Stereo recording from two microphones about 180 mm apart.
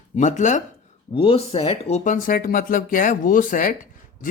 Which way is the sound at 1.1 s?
30° left (ahead or behind).